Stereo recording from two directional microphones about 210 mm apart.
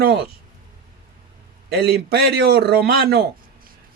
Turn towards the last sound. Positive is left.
turn(degrees=-50)  # may be behind; listen again after turning